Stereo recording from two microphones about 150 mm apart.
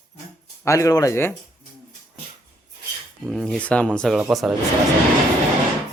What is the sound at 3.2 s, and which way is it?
Speech, centre (ahead or behind).